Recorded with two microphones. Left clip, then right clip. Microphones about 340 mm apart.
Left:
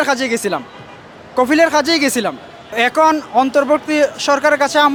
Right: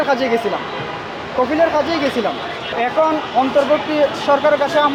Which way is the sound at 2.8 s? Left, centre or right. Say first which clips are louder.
Left 4 dB; left.